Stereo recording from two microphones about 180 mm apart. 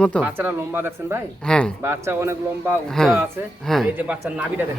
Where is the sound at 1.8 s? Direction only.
15° right (ahead or behind).